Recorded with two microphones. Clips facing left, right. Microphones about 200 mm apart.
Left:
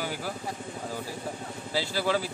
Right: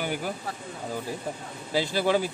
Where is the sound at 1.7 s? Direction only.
20° right (ahead or behind).